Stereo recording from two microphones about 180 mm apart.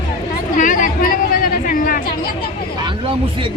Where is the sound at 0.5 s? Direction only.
45° left (ahead or behind).